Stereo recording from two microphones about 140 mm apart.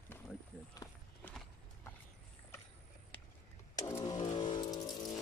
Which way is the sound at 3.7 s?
25° left (ahead or behind).